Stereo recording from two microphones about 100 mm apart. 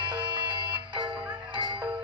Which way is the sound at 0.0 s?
50° right (ahead or behind).